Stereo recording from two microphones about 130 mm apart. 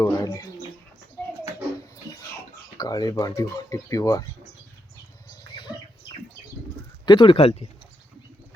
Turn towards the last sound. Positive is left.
turn(degrees=50)  # may be behind; listen again after turning